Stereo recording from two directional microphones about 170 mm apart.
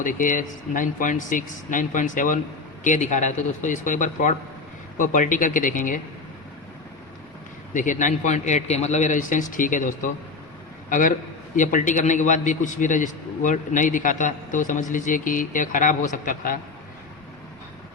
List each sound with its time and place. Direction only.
0.0 s a man's voice: 50° left (ahead or behind)
7.7 s a man's voice: 50° left (ahead or behind)